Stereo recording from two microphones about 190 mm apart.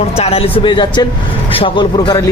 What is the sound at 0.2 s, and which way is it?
Speech, 30° left (ahead or behind).